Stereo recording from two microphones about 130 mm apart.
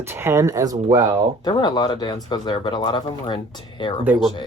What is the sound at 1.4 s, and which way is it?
Speech, 35° left (ahead or behind).